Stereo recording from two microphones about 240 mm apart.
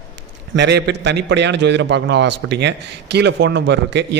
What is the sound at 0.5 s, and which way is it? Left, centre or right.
A man's voice, right.